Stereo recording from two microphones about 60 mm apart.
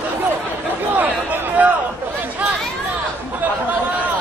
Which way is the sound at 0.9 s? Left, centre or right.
Right.